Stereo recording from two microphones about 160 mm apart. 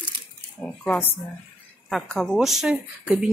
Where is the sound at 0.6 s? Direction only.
10° left (ahead or behind).